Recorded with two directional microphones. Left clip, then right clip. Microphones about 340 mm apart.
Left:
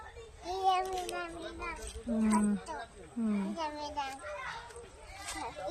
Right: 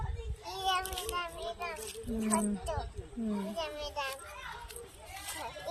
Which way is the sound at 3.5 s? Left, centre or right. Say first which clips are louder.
Even; centre.